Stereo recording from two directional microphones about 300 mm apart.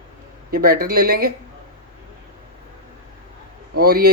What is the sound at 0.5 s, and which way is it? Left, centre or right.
Speech, right.